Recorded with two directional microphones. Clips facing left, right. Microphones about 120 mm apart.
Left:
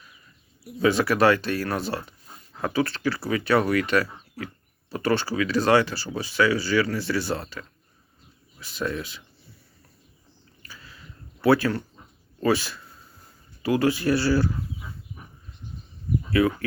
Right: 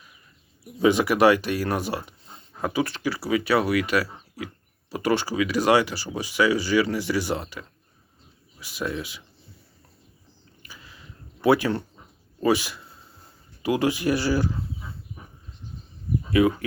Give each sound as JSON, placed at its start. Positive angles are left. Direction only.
{"t": 0.8, "sound": "speech", "side_deg": -15}
{"t": 10.6, "sound": "a sound", "side_deg": -15}
{"t": 11.4, "sound": "speech", "side_deg": -15}
{"t": 16.3, "sound": "speech", "side_deg": -15}